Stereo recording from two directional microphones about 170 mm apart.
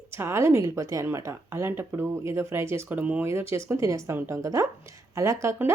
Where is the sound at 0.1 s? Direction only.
15° right (ahead or behind).